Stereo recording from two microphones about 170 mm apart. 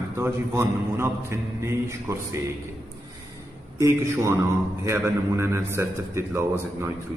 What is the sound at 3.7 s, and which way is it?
A man's voice, 15° right (ahead or behind).